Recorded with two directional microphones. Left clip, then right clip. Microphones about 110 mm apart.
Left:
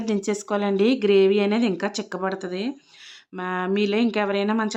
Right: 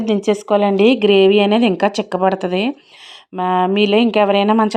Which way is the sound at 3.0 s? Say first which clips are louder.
Right 11 dB; 40° right (ahead or behind).